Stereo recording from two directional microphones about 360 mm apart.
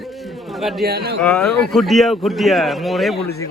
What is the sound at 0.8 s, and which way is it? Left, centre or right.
Speech, right.